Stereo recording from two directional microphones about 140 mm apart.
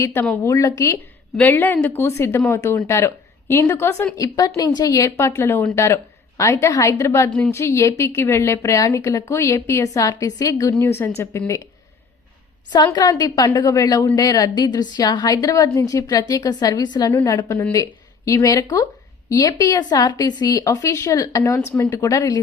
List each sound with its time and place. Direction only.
0.0 s a woman's voice: 15° left (ahead or behind)
12.7 s a woman's voice: 25° left (ahead or behind)